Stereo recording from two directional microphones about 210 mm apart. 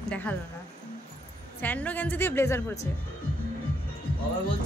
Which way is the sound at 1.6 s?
10° left (ahead or behind).